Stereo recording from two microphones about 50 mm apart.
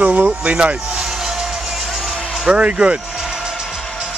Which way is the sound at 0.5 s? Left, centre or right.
Centre.